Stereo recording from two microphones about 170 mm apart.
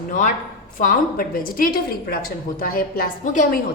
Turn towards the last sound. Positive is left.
turn(degrees=50)  # may be behind; listen again after turning